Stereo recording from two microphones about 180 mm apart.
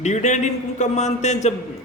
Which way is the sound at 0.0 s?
40° left (ahead or behind).